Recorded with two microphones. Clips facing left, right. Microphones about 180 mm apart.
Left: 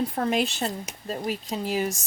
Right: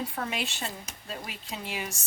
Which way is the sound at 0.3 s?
40° left (ahead or behind).